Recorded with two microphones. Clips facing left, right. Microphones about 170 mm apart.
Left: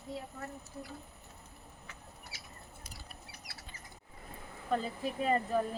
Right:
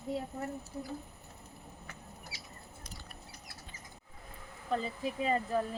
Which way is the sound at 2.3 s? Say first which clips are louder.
Right 2 dB; 50° left (ahead or behind).